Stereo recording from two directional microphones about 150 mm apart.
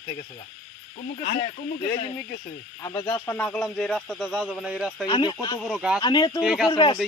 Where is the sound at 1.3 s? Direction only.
60° left (ahead or behind).